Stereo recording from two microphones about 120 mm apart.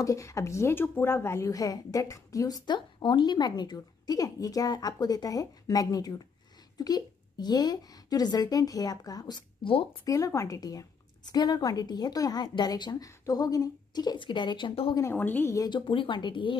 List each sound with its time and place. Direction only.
0.0 s speech: 25° left (ahead or behind); by 9.8 s 45° left (ahead or behind)
10.0 s speech: 25° left (ahead or behind); by 15.0 s 45° left (ahead or behind)
15.0 s a woman's voice: 20° left (ahead or behind)
15.5 s speech: 30° left (ahead or behind)
15.8 s speech: 45° left (ahead or behind)